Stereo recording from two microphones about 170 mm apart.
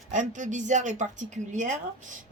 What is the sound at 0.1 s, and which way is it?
Speech, 45° right (ahead or behind).